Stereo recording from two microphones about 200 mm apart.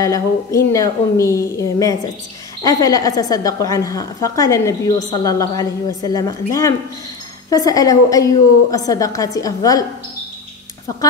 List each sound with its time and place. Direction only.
0.0 s a woman's voice: 15° left (ahead or behind)
7.4 s a woman's voice: 20° left (ahead or behind)